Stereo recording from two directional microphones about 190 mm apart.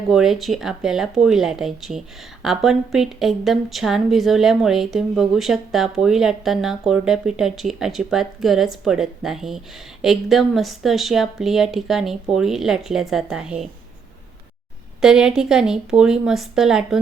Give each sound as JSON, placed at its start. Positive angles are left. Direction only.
{"t": 0.1, "sound": "speech", "side_deg": 0}
{"t": 15.0, "sound": "speech", "side_deg": -5}